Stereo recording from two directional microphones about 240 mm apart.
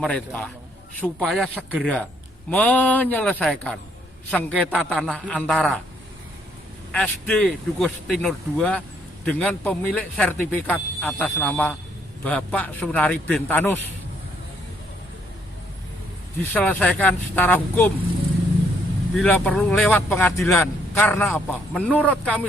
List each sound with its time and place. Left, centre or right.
0.0 s speech: centre
6.9 s speech: centre
16.4 s speech: centre
19.1 s speech: centre